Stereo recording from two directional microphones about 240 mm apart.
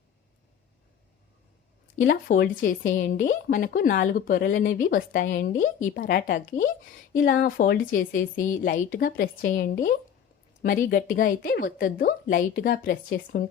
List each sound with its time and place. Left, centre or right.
2.0 s speech: left